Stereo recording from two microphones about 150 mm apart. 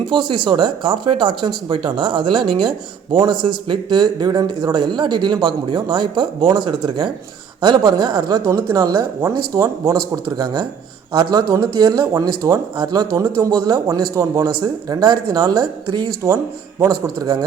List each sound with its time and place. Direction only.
0.0 s a man's voice: 30° right (ahead or behind)